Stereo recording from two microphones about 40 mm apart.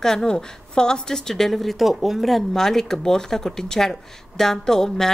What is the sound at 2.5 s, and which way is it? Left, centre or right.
Speech, centre.